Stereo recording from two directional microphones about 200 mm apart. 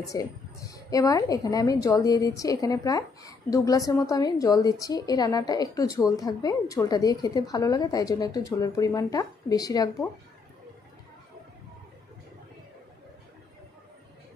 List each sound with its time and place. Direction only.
0.1 s a woman's voice: 15° left (ahead or behind)